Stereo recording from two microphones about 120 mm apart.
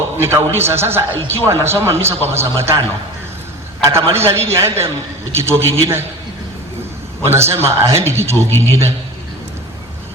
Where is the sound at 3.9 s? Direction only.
20° right (ahead or behind).